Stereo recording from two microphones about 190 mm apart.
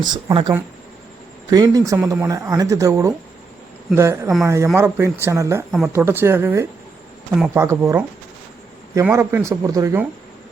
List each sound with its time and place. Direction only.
0.0 s speech: 25° right (ahead or behind)